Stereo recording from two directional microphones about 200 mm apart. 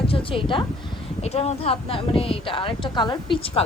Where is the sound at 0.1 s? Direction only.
25° left (ahead or behind).